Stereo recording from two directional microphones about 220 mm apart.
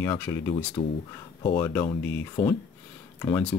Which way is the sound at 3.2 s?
5° left (ahead or behind).